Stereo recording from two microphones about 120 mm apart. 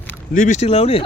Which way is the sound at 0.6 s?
55° left (ahead or behind).